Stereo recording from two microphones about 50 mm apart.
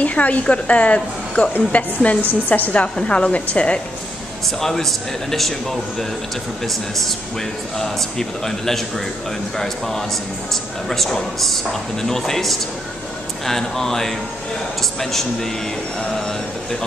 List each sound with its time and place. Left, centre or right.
0.0 s a woman's voice: left
4.6 s a man's voice: centre